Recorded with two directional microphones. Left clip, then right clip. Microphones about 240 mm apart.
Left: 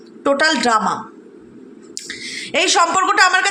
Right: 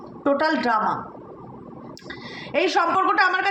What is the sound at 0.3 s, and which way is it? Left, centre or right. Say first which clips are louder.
Speech: left 6 dB; left.